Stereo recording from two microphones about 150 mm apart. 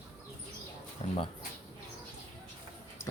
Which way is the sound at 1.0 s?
50° left (ahead or behind).